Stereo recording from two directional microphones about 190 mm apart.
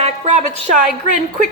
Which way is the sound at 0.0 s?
40° right (ahead or behind).